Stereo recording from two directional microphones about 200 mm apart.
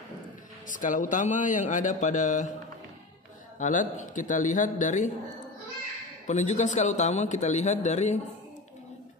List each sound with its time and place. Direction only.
0.7 s a man's voice: 40° left (ahead or behind)
3.5 s a man's voice: 40° left (ahead or behind)
6.2 s a man's voice: 35° left (ahead or behind)